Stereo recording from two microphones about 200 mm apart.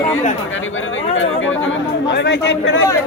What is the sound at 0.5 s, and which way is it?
Speech, 75° left (ahead or behind).